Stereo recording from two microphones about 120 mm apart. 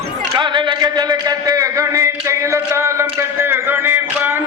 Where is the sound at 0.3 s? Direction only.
40° right (ahead or behind).